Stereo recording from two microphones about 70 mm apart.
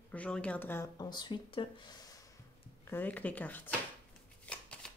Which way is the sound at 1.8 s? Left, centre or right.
Left.